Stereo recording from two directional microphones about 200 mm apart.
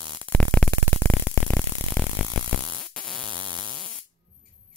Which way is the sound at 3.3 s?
25° right (ahead or behind).